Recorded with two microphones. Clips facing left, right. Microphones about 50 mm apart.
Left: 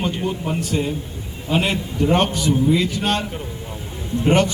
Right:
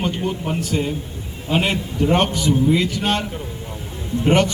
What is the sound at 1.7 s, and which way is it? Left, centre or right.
A man's voice, centre.